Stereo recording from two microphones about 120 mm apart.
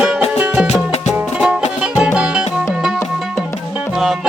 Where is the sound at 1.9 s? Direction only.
15° right (ahead or behind).